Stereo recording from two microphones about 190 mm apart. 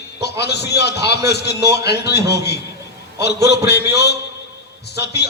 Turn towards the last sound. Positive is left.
turn(degrees=60)  # may be behind; listen again after turning